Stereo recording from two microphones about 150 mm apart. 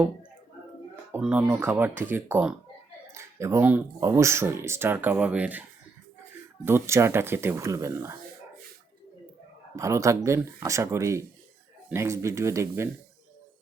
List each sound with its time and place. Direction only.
1.1 s speech: 10° right (ahead or behind)
6.7 s speech: 15° right (ahead or behind)
9.7 s speech: 20° right (ahead or behind)